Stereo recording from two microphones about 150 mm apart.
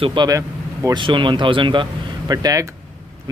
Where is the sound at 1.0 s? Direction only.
35° right (ahead or behind).